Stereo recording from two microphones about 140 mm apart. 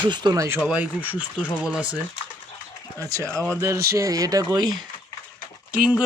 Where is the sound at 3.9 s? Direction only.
25° right (ahead or behind).